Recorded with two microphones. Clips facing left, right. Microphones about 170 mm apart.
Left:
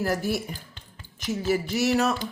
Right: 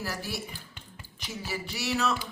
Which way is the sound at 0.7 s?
10° right (ahead or behind).